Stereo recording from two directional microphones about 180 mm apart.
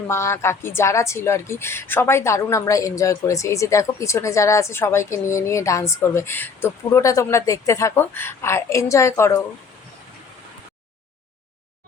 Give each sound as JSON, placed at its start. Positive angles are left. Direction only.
{"t": 0.1, "sound": "speech", "side_deg": 15}